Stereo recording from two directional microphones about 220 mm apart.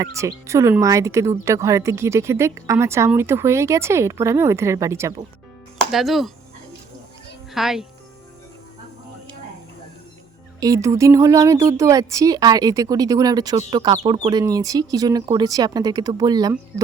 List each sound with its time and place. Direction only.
0.0 s speech: 15° right (ahead or behind)
5.8 s speech: centre (ahead or behind)
7.5 s speech: centre (ahead or behind)
10.6 s speech: 15° right (ahead or behind)